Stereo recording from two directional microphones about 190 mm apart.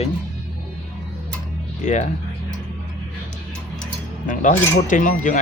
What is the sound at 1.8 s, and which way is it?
Speech, 40° left (ahead or behind).